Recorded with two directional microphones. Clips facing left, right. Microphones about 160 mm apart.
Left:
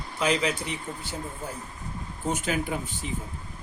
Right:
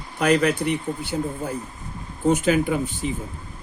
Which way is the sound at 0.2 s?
60° right (ahead or behind).